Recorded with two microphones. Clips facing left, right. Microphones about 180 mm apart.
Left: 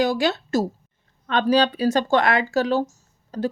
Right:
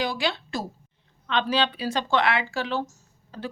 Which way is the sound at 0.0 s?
45° left (ahead or behind).